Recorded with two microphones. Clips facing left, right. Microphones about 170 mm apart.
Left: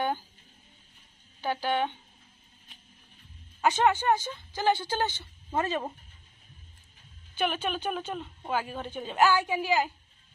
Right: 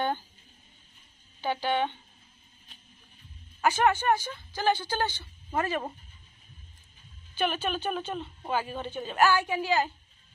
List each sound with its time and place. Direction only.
1.4 s a woman's voice: 5° left (ahead or behind)
3.6 s speech: 20° left (ahead or behind)
7.3 s a woman's voice: 10° left (ahead or behind)